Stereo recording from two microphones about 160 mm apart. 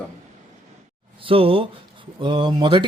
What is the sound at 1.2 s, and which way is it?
Speech, 35° right (ahead or behind).